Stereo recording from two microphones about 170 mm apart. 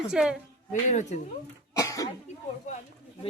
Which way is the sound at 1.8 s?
20° left (ahead or behind).